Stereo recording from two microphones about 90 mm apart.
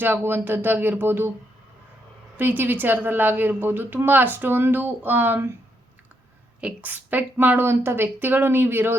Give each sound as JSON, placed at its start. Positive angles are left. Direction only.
{"t": 0.0, "sound": "a woman's voice", "side_deg": -25}
{"t": 2.4, "sound": "a woman's voice", "side_deg": -20}
{"t": 6.6, "sound": "a woman's voice", "side_deg": -15}